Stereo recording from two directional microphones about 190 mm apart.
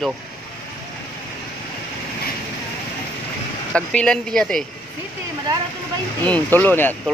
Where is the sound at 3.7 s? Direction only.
5° left (ahead or behind).